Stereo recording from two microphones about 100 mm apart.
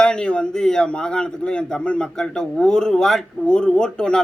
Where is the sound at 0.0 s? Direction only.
10° left (ahead or behind).